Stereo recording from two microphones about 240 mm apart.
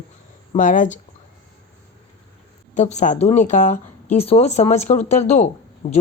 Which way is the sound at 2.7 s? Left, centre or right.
Left.